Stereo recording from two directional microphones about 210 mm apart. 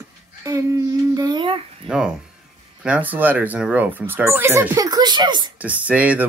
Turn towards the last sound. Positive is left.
turn(degrees=-5)  # may be behind; listen again after turning